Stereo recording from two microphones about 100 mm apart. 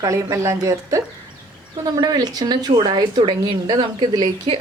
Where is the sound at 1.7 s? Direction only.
45° right (ahead or behind).